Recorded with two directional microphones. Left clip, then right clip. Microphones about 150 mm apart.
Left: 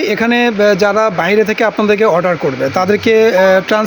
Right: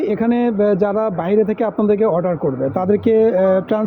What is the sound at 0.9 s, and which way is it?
Speech, 20° left (ahead or behind).